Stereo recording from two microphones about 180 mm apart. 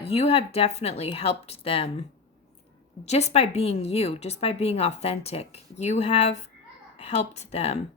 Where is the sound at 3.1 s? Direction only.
35° left (ahead or behind).